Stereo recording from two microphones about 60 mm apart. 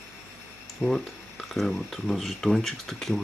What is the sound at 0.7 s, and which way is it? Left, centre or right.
Speech, centre.